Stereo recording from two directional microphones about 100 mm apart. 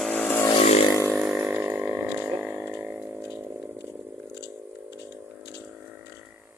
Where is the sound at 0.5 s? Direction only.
75° left (ahead or behind).